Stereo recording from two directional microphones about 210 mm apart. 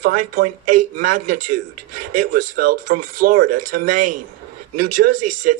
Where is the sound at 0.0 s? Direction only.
40° right (ahead or behind).